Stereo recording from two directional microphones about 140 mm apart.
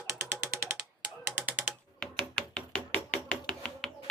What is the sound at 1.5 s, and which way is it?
Typewriter, 10° right (ahead or behind).